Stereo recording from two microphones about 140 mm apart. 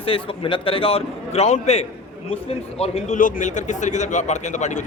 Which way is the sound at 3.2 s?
75° left (ahead or behind).